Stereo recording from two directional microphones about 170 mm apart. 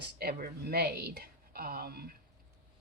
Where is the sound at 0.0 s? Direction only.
65° right (ahead or behind).